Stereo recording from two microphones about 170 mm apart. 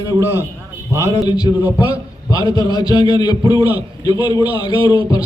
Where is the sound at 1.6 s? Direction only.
10° right (ahead or behind).